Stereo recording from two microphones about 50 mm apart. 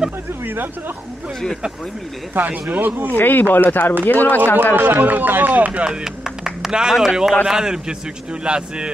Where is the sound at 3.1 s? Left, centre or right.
Left.